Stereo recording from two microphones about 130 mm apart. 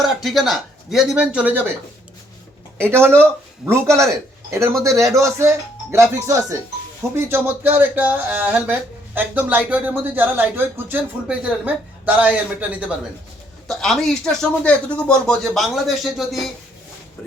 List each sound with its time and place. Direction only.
0.0 s speech: centre (ahead or behind)
2.7 s speech: 15° right (ahead or behind)
13.7 s speech: centre (ahead or behind)